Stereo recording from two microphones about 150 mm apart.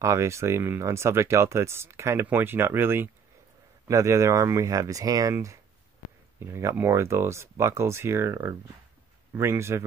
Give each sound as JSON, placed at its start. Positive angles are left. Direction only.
{"t": 0.0, "sound": "speech", "side_deg": -20}